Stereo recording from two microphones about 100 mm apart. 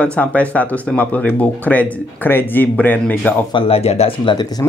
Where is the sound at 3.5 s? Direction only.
85° left.